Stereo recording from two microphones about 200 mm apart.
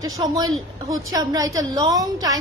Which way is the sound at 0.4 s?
20° right (ahead or behind).